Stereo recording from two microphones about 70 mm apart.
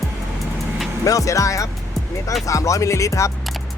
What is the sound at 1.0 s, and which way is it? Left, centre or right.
Speech, left.